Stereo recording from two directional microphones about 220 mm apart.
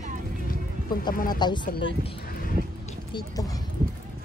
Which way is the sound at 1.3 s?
20° left (ahead or behind).